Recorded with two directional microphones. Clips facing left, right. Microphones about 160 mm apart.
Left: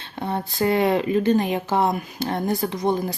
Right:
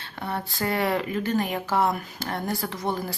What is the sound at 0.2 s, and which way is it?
Speech, 20° left (ahead or behind).